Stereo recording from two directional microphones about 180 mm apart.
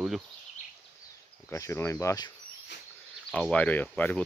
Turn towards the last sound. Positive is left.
turn(degrees=10)  # may be behind; listen again after turning